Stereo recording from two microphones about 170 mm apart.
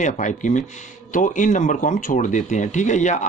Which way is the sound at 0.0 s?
45° left (ahead or behind).